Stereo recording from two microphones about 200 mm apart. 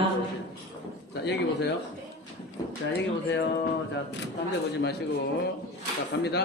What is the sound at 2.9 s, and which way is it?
Speech, 55° left (ahead or behind).